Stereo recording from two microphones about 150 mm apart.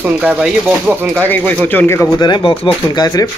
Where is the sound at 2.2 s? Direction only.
30° left (ahead or behind).